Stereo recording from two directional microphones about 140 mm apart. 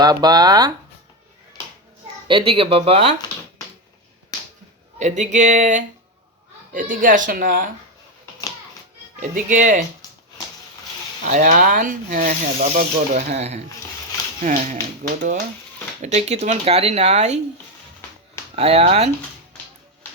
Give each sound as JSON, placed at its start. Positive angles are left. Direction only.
{"t": 0.0, "sound": "speech", "side_deg": -30}
{"t": 2.2, "sound": "speech", "side_deg": -40}
{"t": 4.9, "sound": "speech", "side_deg": -60}
{"t": 6.7, "sound": "speech", "side_deg": -75}
{"t": 9.2, "sound": "speech", "side_deg": -65}
{"t": 11.2, "sound": "speech", "side_deg": -65}
{"t": 12.7, "sound": "speech", "side_deg": -55}
{"t": 14.4, "sound": "speech", "side_deg": -65}
{"t": 16.0, "sound": "speech", "side_deg": -55}
{"t": 18.5, "sound": "speech", "side_deg": -45}